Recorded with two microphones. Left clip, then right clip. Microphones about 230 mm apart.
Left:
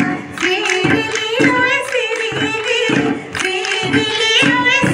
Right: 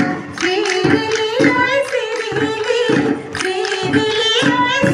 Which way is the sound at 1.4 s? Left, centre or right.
Left.